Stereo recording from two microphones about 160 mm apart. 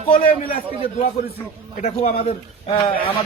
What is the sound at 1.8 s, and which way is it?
Speech, 40° left (ahead or behind).